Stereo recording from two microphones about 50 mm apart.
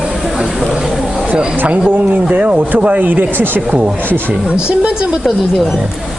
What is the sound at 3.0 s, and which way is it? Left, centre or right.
Speech, right.